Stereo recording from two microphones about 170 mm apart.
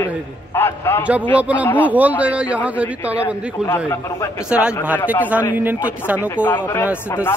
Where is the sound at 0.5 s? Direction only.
15° left (ahead or behind).